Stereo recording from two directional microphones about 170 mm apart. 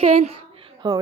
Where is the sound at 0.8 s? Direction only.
20° right (ahead or behind).